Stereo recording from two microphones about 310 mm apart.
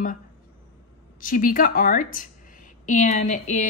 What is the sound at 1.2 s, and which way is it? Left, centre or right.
A woman's voice, left.